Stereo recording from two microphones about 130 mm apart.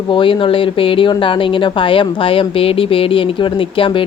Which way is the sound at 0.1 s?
40° left (ahead or behind).